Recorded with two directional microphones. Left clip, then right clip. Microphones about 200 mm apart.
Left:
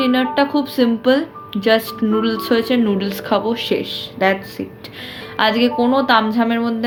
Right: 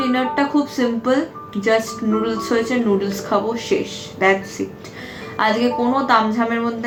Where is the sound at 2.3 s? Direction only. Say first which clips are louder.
Left 3 dB; 45° left (ahead or behind).